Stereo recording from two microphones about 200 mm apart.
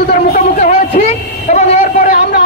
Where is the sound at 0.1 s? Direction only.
40° left (ahead or behind).